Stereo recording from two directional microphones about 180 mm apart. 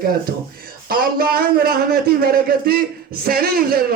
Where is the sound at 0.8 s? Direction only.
55° right (ahead or behind).